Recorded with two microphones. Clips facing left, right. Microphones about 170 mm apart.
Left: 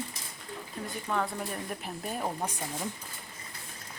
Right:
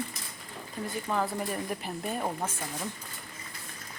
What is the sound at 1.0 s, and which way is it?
Speech, centre (ahead or behind).